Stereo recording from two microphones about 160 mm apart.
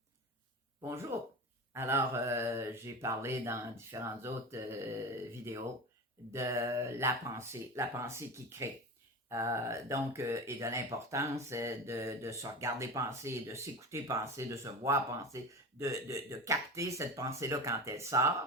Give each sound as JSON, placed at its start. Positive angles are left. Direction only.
{"t": 1.7, "sound": "mantra", "side_deg": -15}
{"t": 6.3, "sound": "mantra", "side_deg": -20}
{"t": 9.3, "sound": "speech", "side_deg": -20}